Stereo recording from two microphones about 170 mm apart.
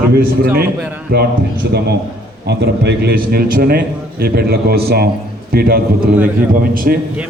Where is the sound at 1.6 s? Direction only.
75° right (ahead or behind).